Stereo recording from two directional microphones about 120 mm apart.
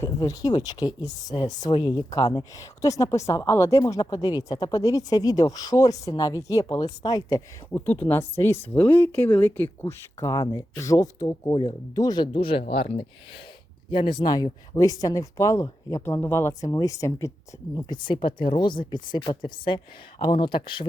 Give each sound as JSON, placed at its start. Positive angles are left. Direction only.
{"t": 0.2, "sound": "a woman's voice", "side_deg": 35}
{"t": 7.7, "sound": "speech", "side_deg": 15}
{"t": 9.8, "sound": "speech", "side_deg": 30}
{"t": 13.9, "sound": "a woman's voice", "side_deg": 45}
{"t": 17.7, "sound": "a woman's voice", "side_deg": 40}